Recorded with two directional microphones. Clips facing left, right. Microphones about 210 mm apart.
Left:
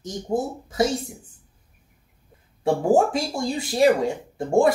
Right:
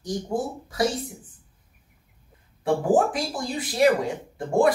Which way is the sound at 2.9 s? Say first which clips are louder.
Left 2 dB; 25° left (ahead or behind).